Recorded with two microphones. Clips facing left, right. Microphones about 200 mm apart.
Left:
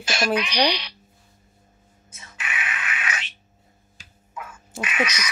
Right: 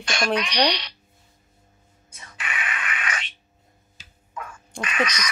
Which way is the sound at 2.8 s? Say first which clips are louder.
Even; 5° left (ahead or behind).